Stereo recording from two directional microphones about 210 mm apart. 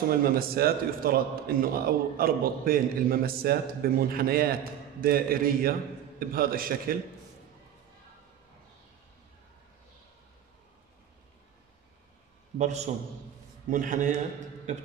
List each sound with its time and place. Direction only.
0.1 s a man's voice: 45° right (ahead or behind)
12.5 s a man's voice: 35° right (ahead or behind)